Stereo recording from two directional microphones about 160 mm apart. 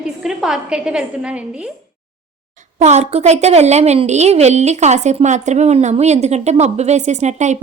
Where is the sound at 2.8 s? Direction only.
45° right (ahead or behind).